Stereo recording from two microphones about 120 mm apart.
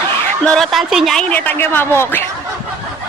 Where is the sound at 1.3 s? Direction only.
15° left (ahead or behind).